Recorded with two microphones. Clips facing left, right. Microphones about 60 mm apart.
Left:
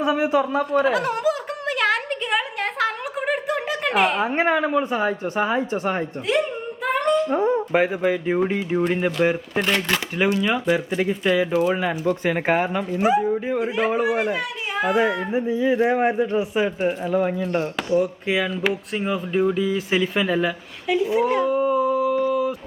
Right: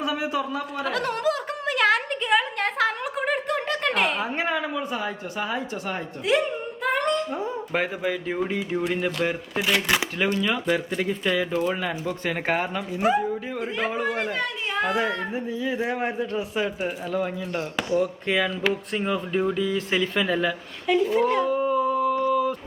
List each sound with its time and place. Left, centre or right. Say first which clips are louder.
0.0 s a man's voice: left 6 dB; left
0.9 s a sound: left 4 dB; centre
4.4 s speech: left 7 dB; left
6.3 s speech: left 1 dB; centre
6.8 s humming: left 3 dB; centre
7.3 s a sound: left 9 dB; left
7.7 s speech: left 6 dB; centre
9.6 s speech: right 2 dB; centre
10.2 s speech: left 3 dB; centre
13.2 s speech: left 6 dB; centre
15.3 s speech: left 7 dB; left
21.6 s a sound: left 3 dB; centre